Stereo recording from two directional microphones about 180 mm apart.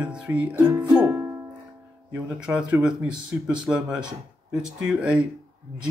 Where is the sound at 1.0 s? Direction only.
15° right (ahead or behind).